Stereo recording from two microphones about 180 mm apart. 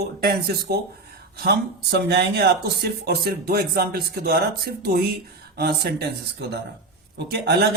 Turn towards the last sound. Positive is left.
turn(degrees=-60)  # may be behind; listen again after turning